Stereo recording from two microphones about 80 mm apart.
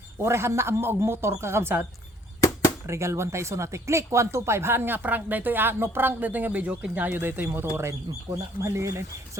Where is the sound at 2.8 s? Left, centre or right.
Right.